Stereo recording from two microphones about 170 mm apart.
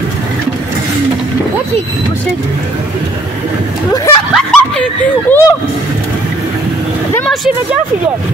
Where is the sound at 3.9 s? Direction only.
20° left (ahead or behind).